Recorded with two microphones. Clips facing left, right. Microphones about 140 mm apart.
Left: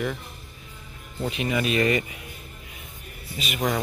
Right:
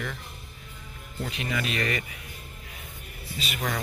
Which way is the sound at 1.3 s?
20° left (ahead or behind).